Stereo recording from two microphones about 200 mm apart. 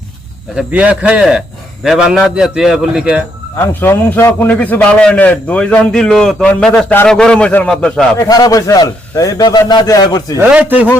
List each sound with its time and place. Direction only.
0.5 s a man's voice: 5° right (ahead or behind)
3.6 s a man's voice: 10° left (ahead or behind)
8.3 s a man's voice: 20° left (ahead or behind)
10.3 s speech: 10° right (ahead or behind)